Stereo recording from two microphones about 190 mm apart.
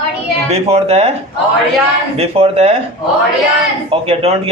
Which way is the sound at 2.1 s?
30° right (ahead or behind).